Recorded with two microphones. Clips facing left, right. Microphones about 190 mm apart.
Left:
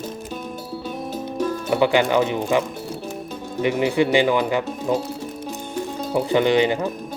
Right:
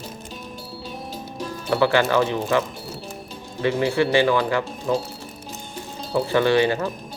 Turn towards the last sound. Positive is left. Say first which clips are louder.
# left 1 dB
turn(degrees=20)  # may be behind; listen again after turning